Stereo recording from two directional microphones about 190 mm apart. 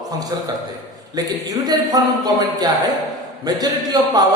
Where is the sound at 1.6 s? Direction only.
20° right (ahead or behind).